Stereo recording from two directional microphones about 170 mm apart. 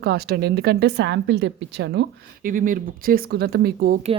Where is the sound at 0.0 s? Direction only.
70° right (ahead or behind); by 2.0 s 90° right.